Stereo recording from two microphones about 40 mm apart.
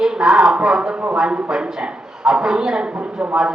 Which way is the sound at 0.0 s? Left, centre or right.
Centre.